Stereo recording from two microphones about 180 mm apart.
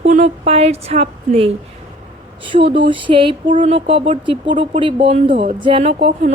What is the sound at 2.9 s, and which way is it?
Speech, 30° right (ahead or behind).